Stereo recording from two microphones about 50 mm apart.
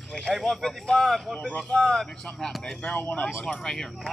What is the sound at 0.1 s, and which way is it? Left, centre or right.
A man's voice, centre.